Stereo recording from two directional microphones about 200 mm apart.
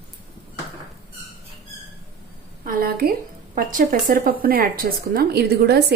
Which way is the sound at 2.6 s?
50° right (ahead or behind).